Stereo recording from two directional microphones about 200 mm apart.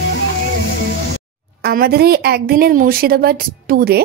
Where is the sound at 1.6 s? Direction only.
50° right (ahead or behind).